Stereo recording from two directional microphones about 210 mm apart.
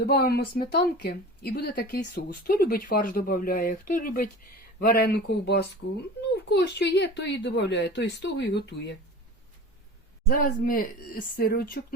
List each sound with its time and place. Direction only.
0.0 s a woman's voice: 50° left (ahead or behind)
10.2 s a woman's voice: 45° left (ahead or behind)